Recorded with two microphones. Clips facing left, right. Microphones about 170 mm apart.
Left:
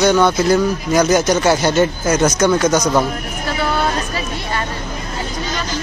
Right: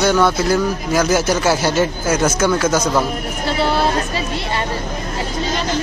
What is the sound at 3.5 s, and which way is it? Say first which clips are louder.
Vehicle: right 2 dB; 30° right (ahead or behind).